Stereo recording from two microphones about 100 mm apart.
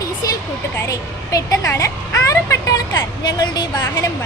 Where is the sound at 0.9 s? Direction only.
35° left (ahead or behind).